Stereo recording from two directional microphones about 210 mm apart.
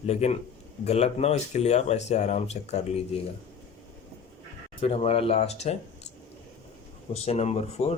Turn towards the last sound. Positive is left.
turn(degrees=30)  # may be behind; listen again after turning